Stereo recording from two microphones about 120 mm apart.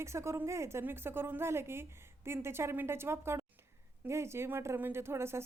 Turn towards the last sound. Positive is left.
turn(degrees=-20)  # may be behind; listen again after turning